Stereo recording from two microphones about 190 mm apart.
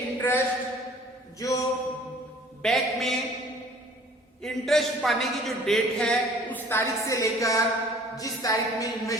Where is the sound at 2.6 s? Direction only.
Centre (ahead or behind).